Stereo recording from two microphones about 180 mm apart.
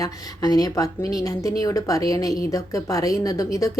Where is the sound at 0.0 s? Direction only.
20° left (ahead or behind).